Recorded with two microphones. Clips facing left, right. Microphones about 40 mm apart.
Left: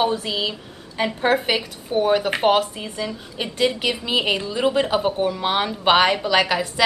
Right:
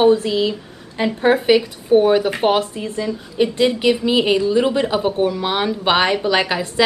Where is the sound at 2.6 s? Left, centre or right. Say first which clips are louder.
Right 4 dB; left.